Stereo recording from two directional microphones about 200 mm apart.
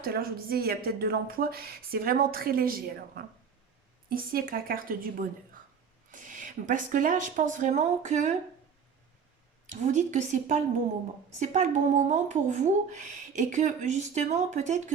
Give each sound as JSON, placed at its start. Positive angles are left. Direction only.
{"t": 0.0, "sound": "a woman's voice", "side_deg": -50}
{"t": 9.6, "sound": "speech", "side_deg": -35}